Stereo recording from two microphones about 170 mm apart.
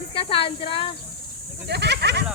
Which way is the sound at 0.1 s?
30° left (ahead or behind).